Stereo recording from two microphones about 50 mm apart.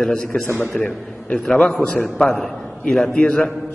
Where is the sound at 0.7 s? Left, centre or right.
Centre.